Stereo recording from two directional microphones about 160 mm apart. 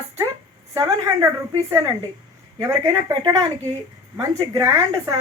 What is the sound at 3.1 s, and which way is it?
A woman's voice, 30° right (ahead or behind).